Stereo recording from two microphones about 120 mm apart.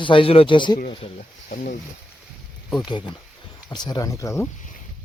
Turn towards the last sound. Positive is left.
turn(degrees=25)  # may be behind; listen again after turning